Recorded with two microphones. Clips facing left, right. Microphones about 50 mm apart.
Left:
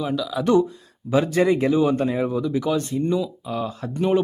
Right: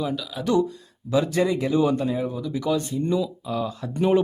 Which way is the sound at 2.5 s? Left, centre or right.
Centre.